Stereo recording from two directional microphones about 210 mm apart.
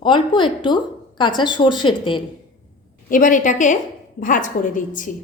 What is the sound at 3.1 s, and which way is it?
A woman's voice, 40° left (ahead or behind).